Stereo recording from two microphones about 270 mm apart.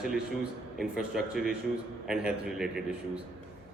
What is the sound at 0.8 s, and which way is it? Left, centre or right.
Speech, centre.